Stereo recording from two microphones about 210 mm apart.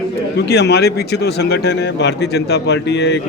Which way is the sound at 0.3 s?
50° left (ahead or behind).